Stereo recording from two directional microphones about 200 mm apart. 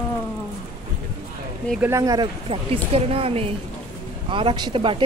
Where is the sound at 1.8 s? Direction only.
15° right (ahead or behind).